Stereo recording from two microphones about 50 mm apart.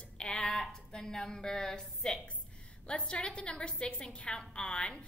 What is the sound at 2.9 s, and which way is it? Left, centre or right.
A woman's voice, left.